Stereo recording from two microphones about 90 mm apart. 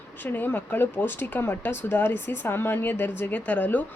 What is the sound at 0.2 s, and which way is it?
Speech, 20° left (ahead or behind).